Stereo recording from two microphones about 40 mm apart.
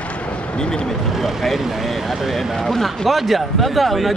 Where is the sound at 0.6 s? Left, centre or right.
Centre.